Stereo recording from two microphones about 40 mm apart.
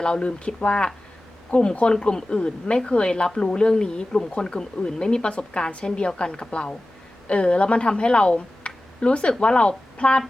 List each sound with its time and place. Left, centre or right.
0.0 s a woman's voice: left
1.5 s speech: left
1.9 s a woman's voice: centre